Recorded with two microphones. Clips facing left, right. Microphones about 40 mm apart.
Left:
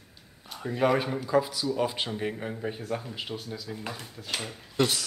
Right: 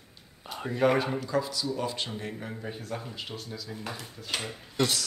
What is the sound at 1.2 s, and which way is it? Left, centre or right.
Speech, centre.